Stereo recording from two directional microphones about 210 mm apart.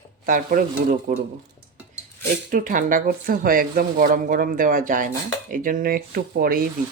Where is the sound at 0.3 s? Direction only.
40° right (ahead or behind).